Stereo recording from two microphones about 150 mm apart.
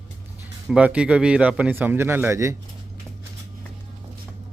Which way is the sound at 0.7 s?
10° right (ahead or behind).